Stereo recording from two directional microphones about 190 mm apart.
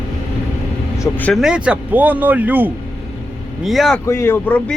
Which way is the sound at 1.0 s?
10° left (ahead or behind).